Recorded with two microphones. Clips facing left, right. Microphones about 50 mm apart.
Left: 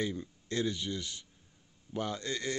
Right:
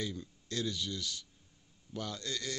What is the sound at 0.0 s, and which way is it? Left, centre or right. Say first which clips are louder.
Speech: left 4 dB; left.